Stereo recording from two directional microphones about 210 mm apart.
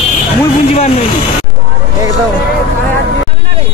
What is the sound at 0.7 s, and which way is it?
Speech, 30° left (ahead or behind).